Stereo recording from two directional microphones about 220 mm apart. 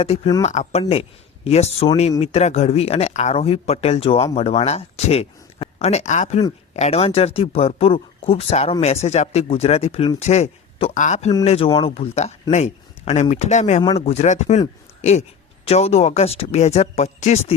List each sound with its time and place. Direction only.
0.0 s speech: 25° left (ahead or behind)
15.6 s speech: 30° left (ahead or behind)